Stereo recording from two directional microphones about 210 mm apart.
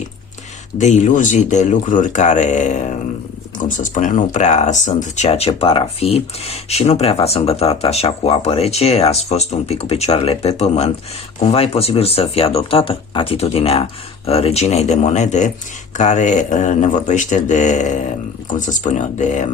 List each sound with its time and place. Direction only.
0.8 s speech: 35° left (ahead or behind)
3.8 s speech: 40° left (ahead or behind)